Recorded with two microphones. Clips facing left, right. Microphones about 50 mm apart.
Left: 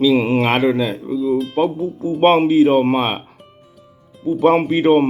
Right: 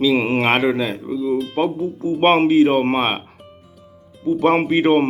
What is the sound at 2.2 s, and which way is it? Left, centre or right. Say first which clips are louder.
A man's voice: left 1 dB; right.